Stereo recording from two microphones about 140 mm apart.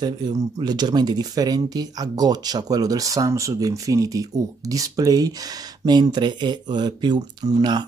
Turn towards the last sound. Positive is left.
turn(degrees=-30)  # may be behind; listen again after turning